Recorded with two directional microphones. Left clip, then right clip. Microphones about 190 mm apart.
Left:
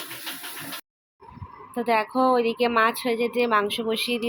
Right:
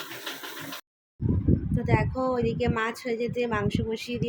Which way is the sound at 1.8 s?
10° left (ahead or behind).